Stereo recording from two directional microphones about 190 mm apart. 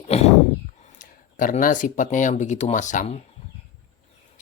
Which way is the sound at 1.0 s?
45° left (ahead or behind).